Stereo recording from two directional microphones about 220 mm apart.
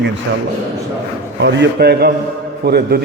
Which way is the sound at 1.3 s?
55° right (ahead or behind).